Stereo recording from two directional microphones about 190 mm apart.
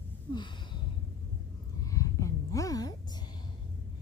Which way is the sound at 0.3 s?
25° left (ahead or behind).